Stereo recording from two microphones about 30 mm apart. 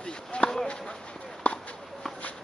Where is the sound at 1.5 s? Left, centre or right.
Left.